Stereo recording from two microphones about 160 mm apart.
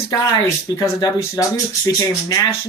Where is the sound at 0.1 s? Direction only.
20° left (ahead or behind).